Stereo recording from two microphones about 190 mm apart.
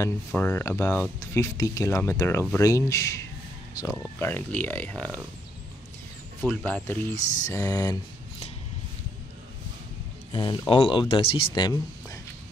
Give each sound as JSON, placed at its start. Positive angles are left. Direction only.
{"t": 0.0, "sound": "speech", "side_deg": 10}
{"t": 6.4, "sound": "speech", "side_deg": 5}
{"t": 10.3, "sound": "speech", "side_deg": 25}